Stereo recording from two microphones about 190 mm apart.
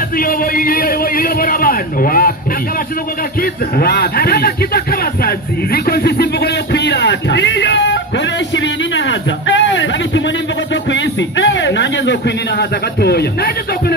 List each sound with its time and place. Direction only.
0.2 s a man's voice: 50° left (ahead or behind)
3.7 s speech: 55° left (ahead or behind); by 8.0 s 70° left (ahead or behind)
9.5 s speech: 75° left (ahead or behind); by 13.9 s 55° left (ahead or behind)